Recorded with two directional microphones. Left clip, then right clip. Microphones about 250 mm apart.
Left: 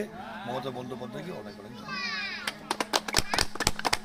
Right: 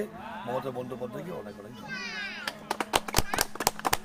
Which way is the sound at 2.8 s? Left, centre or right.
Centre.